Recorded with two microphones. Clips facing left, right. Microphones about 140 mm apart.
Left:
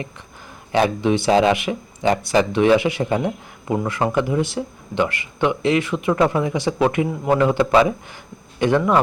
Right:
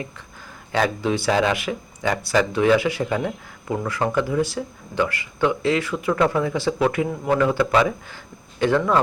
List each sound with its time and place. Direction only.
0.7 s speech: 20° left (ahead or behind)